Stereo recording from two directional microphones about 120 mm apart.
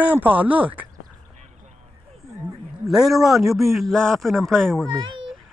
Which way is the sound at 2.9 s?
5° right (ahead or behind).